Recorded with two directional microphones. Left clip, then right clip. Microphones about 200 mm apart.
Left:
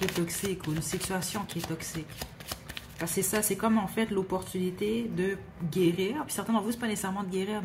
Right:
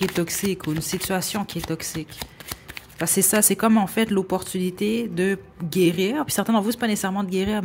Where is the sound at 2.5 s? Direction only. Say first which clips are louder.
Right 3 dB; 25° right (ahead or behind).